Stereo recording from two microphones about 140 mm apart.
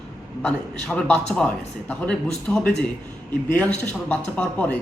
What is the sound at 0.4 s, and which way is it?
A man's voice, 5° left (ahead or behind).